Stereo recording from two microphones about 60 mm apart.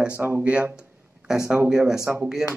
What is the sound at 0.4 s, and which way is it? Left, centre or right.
Speech, right.